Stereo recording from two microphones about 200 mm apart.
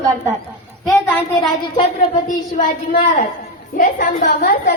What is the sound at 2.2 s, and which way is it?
A woman's voice, 40° left (ahead or behind).